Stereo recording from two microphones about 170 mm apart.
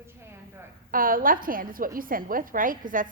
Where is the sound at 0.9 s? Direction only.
55° right (ahead or behind).